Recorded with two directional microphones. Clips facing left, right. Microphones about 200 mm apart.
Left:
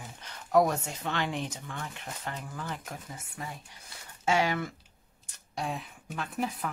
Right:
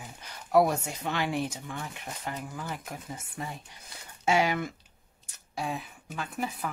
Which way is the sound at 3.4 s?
25° right (ahead or behind).